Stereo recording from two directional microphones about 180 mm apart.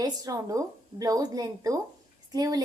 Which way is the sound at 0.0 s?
20° right (ahead or behind).